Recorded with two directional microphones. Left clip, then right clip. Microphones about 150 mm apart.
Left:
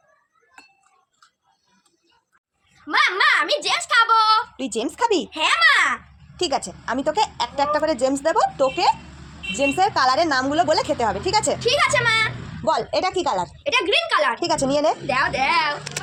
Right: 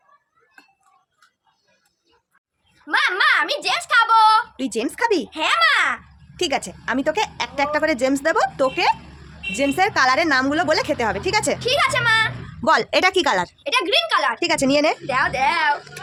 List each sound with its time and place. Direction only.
2.8 s a woman's voice: 20° right (ahead or behind)
12.6 s speech: 60° right (ahead or behind)
13.6 s a woman's voice: 25° right (ahead or behind)
14.4 s speech: 40° right (ahead or behind)
15.0 s a woman's voice: 25° right (ahead or behind)